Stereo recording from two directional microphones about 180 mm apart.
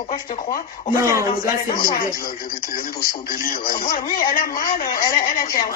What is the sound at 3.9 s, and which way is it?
A man's voice, 50° left (ahead or behind).